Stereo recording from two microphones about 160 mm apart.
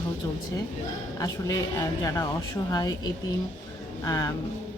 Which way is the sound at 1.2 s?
20° left (ahead or behind).